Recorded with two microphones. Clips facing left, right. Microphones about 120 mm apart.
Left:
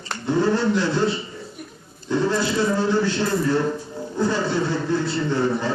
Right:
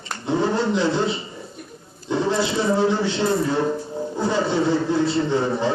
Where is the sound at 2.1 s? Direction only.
20° right (ahead or behind).